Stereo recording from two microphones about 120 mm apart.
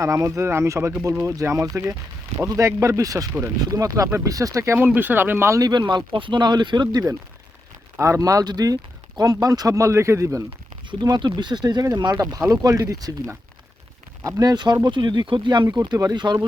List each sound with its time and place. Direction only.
0.0 s speech: 25° right (ahead or behind)